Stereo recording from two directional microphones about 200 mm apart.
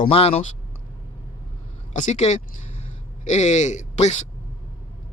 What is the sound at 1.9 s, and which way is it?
Speech, 35° left (ahead or behind).